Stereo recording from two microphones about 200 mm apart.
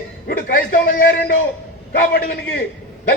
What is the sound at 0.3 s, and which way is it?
A man's voice, 45° left (ahead or behind).